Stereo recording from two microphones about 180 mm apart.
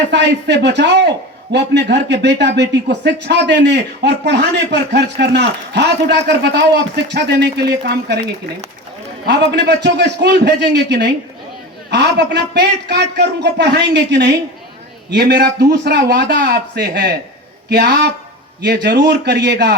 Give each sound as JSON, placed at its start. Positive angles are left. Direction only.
{"t": 0.1, "sound": "speech", "side_deg": -70}
{"t": 9.2, "sound": "speech", "side_deg": -70}